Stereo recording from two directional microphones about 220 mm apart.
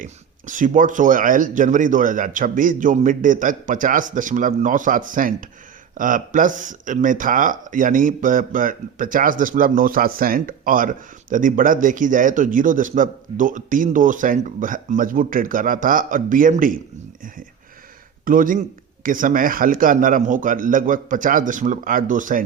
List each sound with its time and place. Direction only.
0.0 s speech: 35° right (ahead or behind)
18.3 s speech: 40° right (ahead or behind)